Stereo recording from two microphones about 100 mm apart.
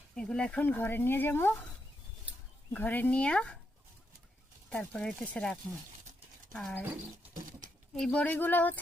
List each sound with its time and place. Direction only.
0.2 s speech: 10° left (ahead or behind)
2.7 s speech: 20° left (ahead or behind)
4.7 s speech: 10° left (ahead or behind)
7.9 s speech: 10° left (ahead or behind)